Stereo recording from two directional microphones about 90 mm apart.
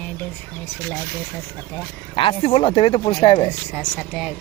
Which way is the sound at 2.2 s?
75° left (ahead or behind).